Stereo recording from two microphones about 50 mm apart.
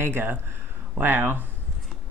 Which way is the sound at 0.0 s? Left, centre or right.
Right.